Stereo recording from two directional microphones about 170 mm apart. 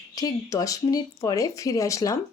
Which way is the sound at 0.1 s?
20° left (ahead or behind).